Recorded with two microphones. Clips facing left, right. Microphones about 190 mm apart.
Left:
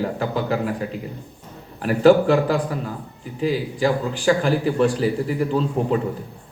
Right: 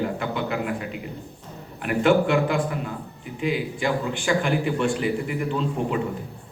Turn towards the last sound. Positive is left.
turn(degrees=35)  # may be behind; listen again after turning